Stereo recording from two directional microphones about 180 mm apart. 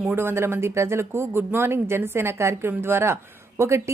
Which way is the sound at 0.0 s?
10° right (ahead or behind).